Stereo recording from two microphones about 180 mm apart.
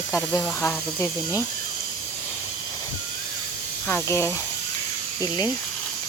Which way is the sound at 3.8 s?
15° left (ahead or behind).